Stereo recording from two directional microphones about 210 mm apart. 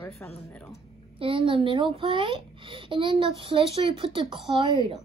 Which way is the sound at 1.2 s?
25° right (ahead or behind).